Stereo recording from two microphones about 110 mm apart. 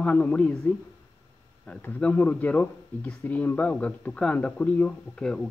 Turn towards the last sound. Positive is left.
turn(degrees=5)  # may be behind; listen again after turning